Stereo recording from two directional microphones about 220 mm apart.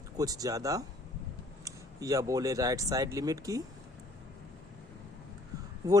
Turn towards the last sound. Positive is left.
turn(degrees=-15)  # may be behind; listen again after turning